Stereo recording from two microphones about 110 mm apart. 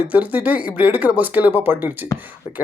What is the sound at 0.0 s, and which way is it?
Speech, 15° right (ahead or behind).